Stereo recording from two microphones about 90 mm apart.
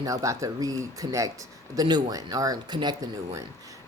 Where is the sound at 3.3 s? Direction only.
40° right (ahead or behind).